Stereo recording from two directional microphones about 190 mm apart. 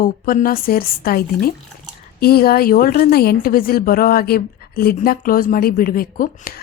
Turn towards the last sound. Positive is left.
turn(degrees=50)  # may be behind; listen again after turning